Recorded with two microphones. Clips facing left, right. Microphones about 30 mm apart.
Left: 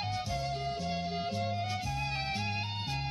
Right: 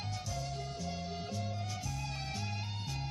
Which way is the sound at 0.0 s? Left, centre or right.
Left.